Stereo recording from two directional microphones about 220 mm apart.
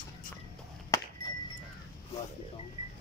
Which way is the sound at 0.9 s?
15° left (ahead or behind).